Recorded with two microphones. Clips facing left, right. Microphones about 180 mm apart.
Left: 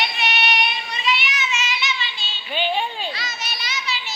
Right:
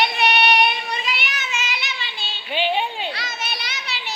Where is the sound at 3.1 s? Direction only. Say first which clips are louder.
Right 2 dB; 55° right (ahead or behind).